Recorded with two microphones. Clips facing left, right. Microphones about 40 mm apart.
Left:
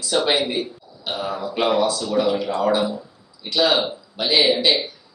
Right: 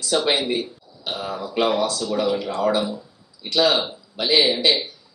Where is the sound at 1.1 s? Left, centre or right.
Centre.